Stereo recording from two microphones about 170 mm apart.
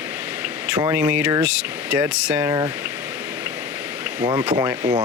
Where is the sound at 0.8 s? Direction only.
10° right (ahead or behind).